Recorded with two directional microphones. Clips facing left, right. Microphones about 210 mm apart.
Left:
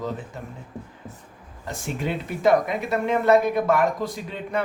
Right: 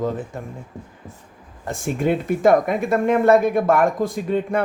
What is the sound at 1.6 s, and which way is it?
Speech, 50° right (ahead or behind).